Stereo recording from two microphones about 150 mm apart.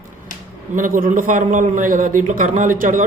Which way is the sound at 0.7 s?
65° right (ahead or behind).